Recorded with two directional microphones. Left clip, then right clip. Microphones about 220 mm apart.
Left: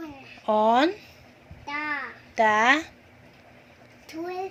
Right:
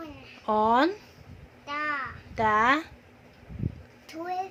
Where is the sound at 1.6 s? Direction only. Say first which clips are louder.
Even; 20° right (ahead or behind).